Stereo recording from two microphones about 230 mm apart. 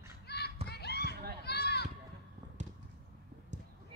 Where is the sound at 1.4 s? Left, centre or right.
Left.